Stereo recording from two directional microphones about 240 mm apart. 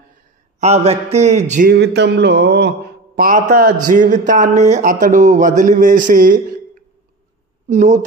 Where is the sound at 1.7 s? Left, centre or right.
Right.